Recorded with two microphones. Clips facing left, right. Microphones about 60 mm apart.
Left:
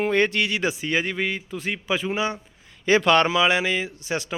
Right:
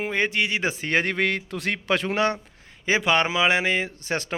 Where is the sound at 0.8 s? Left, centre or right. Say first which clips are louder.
Right 2 dB; right.